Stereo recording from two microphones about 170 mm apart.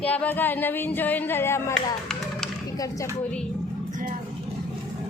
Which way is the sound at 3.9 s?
50° right (ahead or behind).